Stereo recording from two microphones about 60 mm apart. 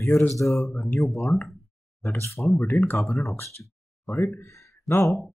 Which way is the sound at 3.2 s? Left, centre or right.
Left.